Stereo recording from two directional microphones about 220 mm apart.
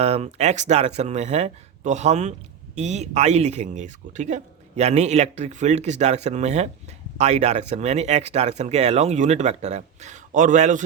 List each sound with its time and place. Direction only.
0.0 s speech: 30° right (ahead or behind)